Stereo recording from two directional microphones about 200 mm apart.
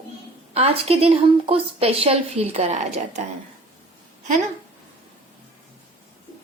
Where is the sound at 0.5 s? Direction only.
30° right (ahead or behind).